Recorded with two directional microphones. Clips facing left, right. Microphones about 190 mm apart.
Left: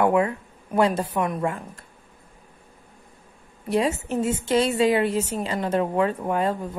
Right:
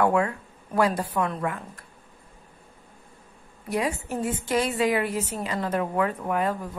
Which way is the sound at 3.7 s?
25° left (ahead or behind).